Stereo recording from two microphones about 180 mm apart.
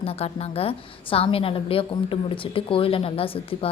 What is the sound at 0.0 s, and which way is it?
A woman's voice, 35° left (ahead or behind).